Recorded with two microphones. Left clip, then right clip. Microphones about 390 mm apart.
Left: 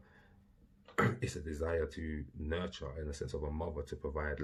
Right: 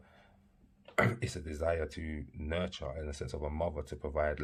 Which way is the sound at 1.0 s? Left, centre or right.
Right.